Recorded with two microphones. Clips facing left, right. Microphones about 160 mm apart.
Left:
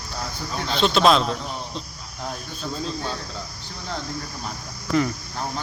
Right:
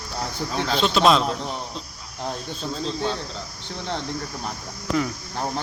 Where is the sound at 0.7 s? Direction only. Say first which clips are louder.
Left 1 dB; centre (ahead or behind).